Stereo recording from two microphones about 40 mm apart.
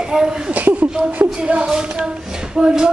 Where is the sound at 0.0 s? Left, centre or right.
Centre.